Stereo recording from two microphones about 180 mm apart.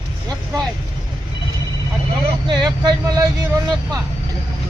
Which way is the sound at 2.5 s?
25° right (ahead or behind).